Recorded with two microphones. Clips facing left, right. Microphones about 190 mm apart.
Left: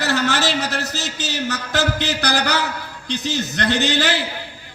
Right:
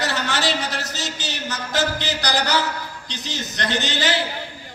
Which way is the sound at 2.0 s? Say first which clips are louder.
Left 2 dB; 60° left (ahead or behind).